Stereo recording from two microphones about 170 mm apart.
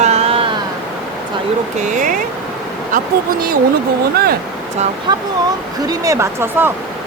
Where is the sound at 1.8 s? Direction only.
50° right (ahead or behind).